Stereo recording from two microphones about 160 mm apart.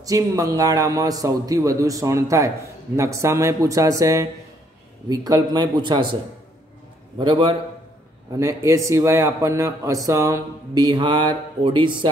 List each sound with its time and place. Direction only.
0.0 s a man's voice: 20° right (ahead or behind)
7.2 s a man's voice: 30° right (ahead or behind)
8.4 s a man's voice: 20° right (ahead or behind)